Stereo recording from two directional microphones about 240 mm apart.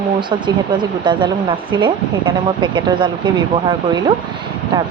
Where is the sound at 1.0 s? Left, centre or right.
Centre.